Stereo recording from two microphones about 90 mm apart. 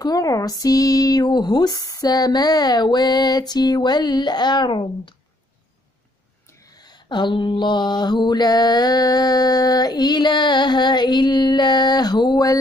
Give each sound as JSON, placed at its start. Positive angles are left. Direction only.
{"t": 0.0, "sound": "mantra", "side_deg": 45}
{"t": 6.7, "sound": "mantra", "side_deg": 50}